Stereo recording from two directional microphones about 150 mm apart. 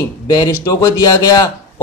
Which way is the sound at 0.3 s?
25° left (ahead or behind).